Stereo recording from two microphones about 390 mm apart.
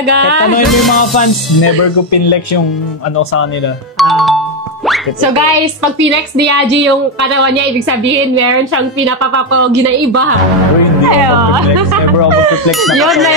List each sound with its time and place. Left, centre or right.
0.7 s speech: centre
4.0 s music: centre
5.9 s a woman's voice: right
12.8 s speech: centre